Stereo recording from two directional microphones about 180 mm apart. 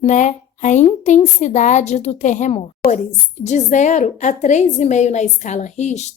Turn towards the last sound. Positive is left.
turn(degrees=40)  # may be behind; listen again after turning